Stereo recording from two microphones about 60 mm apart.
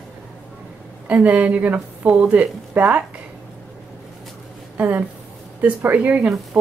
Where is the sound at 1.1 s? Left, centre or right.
Right.